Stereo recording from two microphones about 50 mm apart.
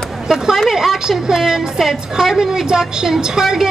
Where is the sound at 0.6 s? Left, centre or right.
Centre.